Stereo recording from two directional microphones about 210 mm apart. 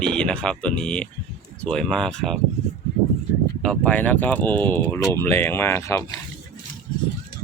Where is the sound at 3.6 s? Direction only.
5° left (ahead or behind).